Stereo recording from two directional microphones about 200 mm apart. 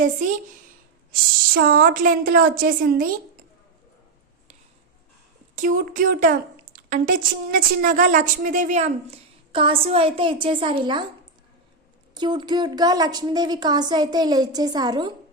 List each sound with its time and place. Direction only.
1.5 s a woman's voice: 50° right (ahead or behind)
5.5 s a woman's voice: 45° right (ahead or behind); by 11.0 s 25° right (ahead or behind)
12.1 s a woman's voice: 20° right (ahead or behind)